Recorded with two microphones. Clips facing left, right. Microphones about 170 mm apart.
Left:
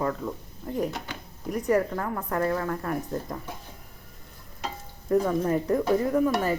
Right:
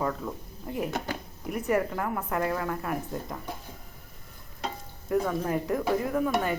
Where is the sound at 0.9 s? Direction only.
50° right (ahead or behind).